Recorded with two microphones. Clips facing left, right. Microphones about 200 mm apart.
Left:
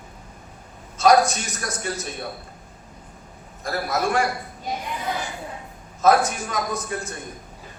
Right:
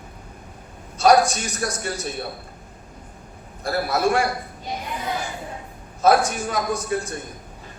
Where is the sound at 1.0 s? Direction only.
35° right (ahead or behind).